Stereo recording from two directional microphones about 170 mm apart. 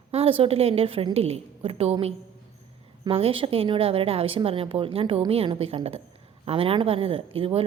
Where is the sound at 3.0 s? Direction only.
35° right (ahead or behind).